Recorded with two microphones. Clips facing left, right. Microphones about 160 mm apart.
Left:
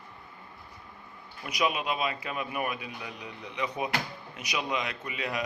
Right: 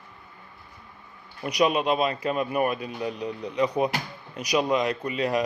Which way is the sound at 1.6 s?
35° right (ahead or behind).